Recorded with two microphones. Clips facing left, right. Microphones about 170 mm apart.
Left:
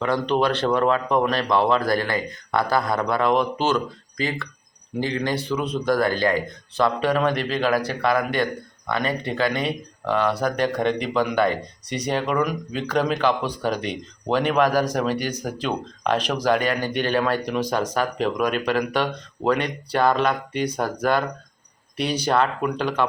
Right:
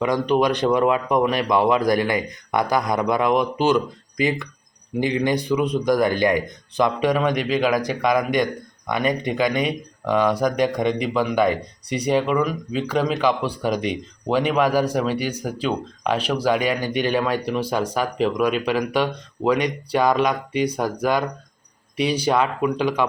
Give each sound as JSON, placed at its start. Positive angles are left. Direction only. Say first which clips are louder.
{"t": 0.0, "sound": "speech", "louder": "right 2 dB", "side_deg": -10}